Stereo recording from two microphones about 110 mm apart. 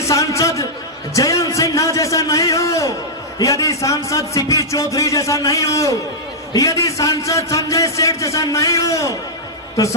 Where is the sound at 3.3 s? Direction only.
30° left (ahead or behind).